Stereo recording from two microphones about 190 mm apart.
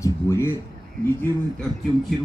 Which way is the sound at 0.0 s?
15° left (ahead or behind).